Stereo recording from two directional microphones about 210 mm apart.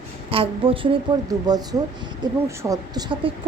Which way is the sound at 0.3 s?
25° right (ahead or behind).